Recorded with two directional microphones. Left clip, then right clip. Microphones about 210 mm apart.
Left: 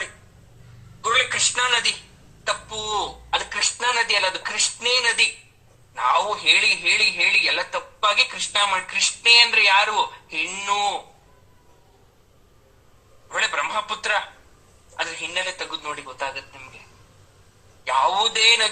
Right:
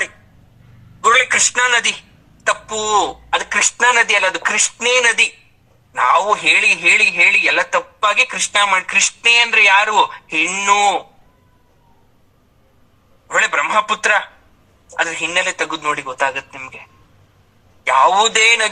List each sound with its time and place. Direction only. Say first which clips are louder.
1.0 s a man's voice: right 8 dB; 35° right (ahead or behind)
13.2 s a man's voice: right 8 dB; 35° right (ahead or behind)
17.8 s a man's voice: right 8 dB; 35° right (ahead or behind)